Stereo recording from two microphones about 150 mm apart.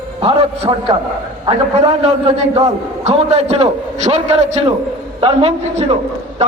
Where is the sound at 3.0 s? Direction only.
45° right (ahead or behind).